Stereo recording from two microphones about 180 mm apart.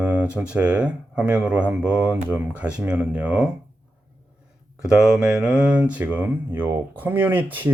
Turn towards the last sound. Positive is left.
turn(degrees=-10)  # may be behind; listen again after turning